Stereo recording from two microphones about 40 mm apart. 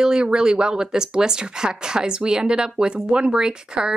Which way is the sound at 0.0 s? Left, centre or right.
Right.